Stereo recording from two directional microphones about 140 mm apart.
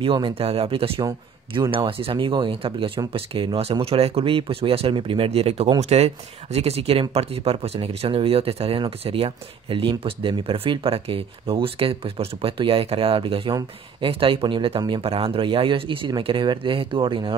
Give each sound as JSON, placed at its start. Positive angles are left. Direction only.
{"t": 0.0, "sound": "speech", "side_deg": -40}
{"t": 1.0, "sound": "a man's voice", "side_deg": -25}
{"t": 1.7, "sound": "speech", "side_deg": -40}